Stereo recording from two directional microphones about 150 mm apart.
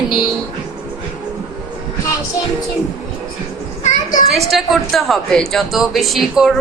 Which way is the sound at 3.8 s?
60° left (ahead or behind).